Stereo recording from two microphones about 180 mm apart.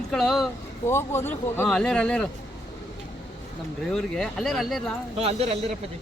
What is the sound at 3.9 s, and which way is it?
Speech, 5° left (ahead or behind).